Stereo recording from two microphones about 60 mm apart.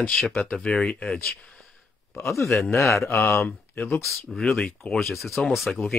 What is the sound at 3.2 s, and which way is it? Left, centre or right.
Speech, centre.